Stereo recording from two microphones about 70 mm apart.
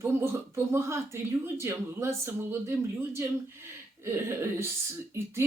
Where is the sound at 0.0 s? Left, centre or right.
Right.